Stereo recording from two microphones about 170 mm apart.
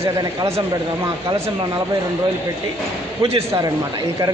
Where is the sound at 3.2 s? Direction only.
20° right (ahead or behind).